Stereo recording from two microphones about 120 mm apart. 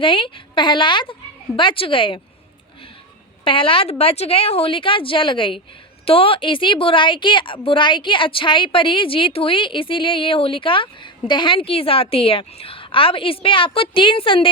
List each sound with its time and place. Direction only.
0.0 s a woman's voice: 45° left (ahead or behind)
3.4 s a woman's voice: 45° left (ahead or behind)